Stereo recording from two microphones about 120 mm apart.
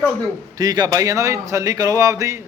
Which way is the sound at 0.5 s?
35° right (ahead or behind).